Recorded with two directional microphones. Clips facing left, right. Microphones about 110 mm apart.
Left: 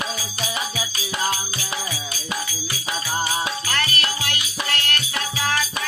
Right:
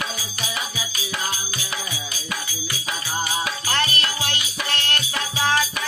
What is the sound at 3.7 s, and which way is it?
Music, 25° right (ahead or behind).